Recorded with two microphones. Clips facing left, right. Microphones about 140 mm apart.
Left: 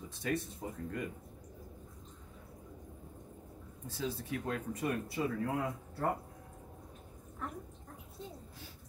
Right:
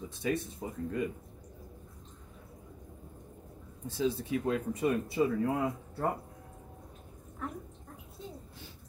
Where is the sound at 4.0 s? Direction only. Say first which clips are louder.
Right 7 dB; 20° right (ahead or behind).